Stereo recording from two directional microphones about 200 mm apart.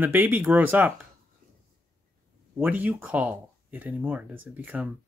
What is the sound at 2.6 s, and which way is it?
Speech, 10° right (ahead or behind).